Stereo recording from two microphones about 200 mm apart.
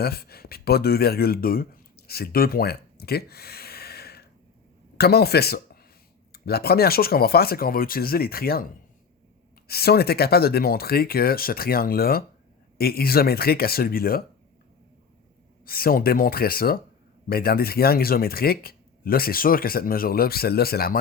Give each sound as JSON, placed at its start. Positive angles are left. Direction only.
{"t": 0.0, "sound": "speech", "side_deg": 50}
{"t": 9.6, "sound": "speech", "side_deg": 50}
{"t": 15.6, "sound": "speech", "side_deg": 50}